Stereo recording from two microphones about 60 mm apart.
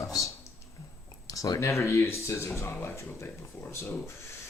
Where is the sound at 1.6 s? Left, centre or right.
Left.